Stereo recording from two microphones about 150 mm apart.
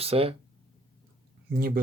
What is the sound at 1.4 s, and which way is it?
Speech, 85° right.